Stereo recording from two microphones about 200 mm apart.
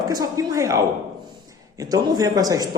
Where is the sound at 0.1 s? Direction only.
15° right (ahead or behind).